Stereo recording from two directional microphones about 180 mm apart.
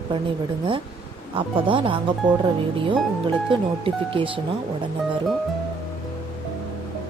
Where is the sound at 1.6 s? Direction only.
30° right (ahead or behind).